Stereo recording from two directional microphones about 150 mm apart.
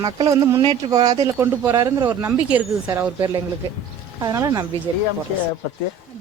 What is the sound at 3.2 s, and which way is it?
A woman's voice, 25° right (ahead or behind).